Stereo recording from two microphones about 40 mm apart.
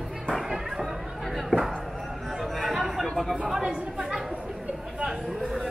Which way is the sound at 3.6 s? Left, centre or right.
Right.